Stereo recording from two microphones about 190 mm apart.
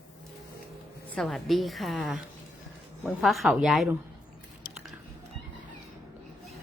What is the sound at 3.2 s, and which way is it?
Speech, centre (ahead or behind).